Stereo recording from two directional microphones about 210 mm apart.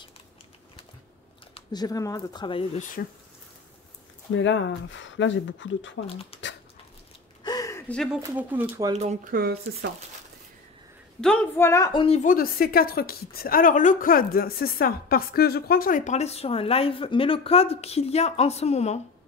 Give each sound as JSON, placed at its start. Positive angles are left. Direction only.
{"t": 1.5, "sound": "speech", "side_deg": 20}
{"t": 2.8, "sound": "a woman's voice", "side_deg": 40}
{"t": 4.3, "sound": "speech", "side_deg": 60}
{"t": 6.0, "sound": "speech", "side_deg": 25}
{"t": 7.4, "sound": "a sound", "side_deg": 15}
{"t": 8.2, "sound": "speech", "side_deg": -10}
{"t": 8.9, "sound": "speech", "side_deg": -30}
{"t": 9.3, "sound": "speech", "side_deg": -45}
{"t": 11.1, "sound": "a woman's voice", "side_deg": 5}